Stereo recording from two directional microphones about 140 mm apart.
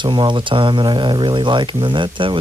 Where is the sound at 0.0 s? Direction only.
35° right (ahead or behind).